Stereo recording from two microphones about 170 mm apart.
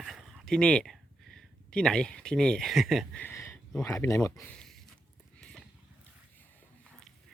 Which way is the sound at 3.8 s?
20° left (ahead or behind).